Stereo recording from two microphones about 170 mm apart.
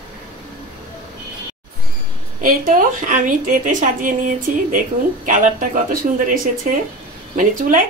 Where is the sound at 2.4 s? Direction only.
55° right (ahead or behind).